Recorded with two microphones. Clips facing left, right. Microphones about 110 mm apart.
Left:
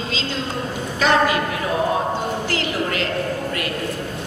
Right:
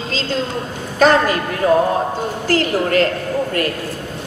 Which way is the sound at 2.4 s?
45° right (ahead or behind).